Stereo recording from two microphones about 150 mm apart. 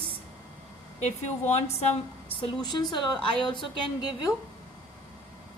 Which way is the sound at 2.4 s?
30° left (ahead or behind).